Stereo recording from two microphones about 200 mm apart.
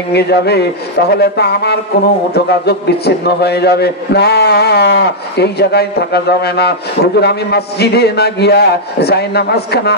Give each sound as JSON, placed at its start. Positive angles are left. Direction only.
{"t": 0.1, "sound": "a man's voice", "side_deg": 55}